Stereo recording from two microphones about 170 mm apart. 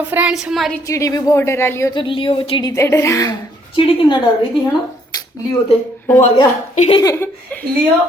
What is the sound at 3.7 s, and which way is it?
Speech, 30° left (ahead or behind).